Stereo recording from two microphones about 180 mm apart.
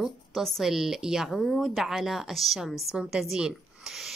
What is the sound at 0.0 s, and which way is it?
A woman's voice, centre (ahead or behind).